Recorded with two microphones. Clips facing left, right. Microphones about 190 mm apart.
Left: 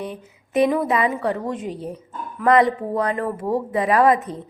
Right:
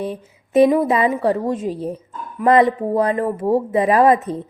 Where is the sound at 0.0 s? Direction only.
25° right (ahead or behind).